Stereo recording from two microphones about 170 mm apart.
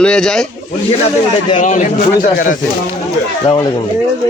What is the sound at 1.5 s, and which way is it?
Speech, 45° left (ahead or behind).